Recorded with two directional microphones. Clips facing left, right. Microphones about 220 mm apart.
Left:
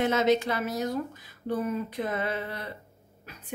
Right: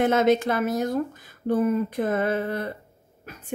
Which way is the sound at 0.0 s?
50° right (ahead or behind).